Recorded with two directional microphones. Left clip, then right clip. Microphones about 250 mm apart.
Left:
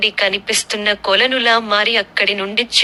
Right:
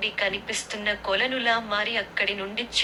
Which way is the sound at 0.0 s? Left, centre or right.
Left.